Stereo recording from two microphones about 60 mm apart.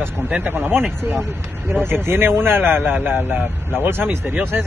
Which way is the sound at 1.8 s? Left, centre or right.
Right.